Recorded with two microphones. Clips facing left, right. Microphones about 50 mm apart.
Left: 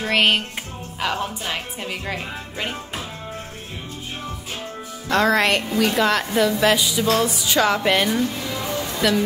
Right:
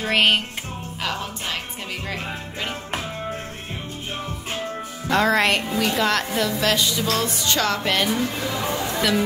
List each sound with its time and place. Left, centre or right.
0.0 s a woman's voice: centre
1.0 s music: centre
5.0 s a woman's voice: centre
6.6 s music: centre
8.4 s chatter: right